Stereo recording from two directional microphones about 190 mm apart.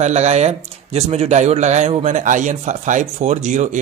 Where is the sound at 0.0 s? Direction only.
35° right (ahead or behind).